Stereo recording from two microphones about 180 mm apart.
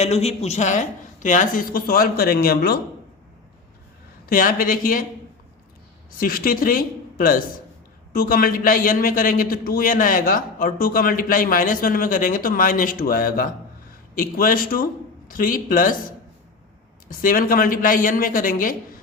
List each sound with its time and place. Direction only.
0.0 s a man's voice: 35° left (ahead or behind); by 2.7 s 55° left (ahead or behind)
4.3 s a man's voice: 50° left (ahead or behind)
6.1 s a man's voice: 55° left (ahead or behind)
17.1 s a man's voice: 50° left (ahead or behind)